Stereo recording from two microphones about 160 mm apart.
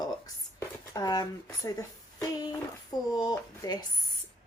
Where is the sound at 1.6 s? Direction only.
20° left (ahead or behind).